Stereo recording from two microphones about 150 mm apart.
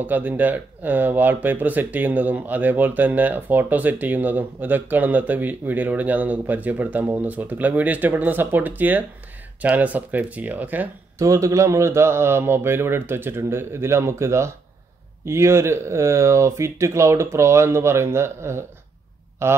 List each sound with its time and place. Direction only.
0.0 s speech: 10° right (ahead or behind)